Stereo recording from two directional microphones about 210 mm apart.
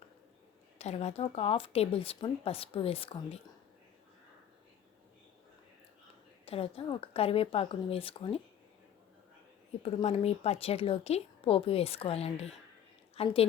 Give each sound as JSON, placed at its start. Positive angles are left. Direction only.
{"t": 0.8, "sound": "a woman's voice", "side_deg": 30}
{"t": 6.4, "sound": "a woman's voice", "side_deg": 25}
{"t": 9.8, "sound": "a woman's voice", "side_deg": 30}